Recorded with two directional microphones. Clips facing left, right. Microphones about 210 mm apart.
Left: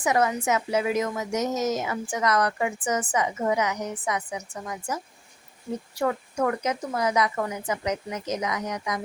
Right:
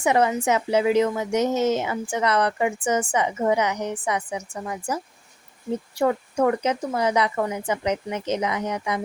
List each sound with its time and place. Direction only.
0.0 s a woman's voice: 30° right (ahead or behind)
6.0 s a woman's voice: 30° right (ahead or behind)